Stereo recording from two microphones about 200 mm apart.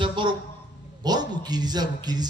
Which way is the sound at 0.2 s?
25° right (ahead or behind).